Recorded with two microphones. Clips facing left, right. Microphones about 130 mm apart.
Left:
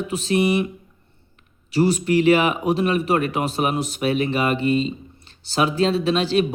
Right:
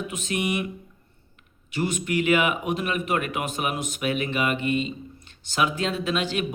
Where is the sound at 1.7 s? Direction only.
35° left (ahead or behind).